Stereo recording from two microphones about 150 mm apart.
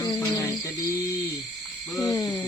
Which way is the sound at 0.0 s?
20° left (ahead or behind).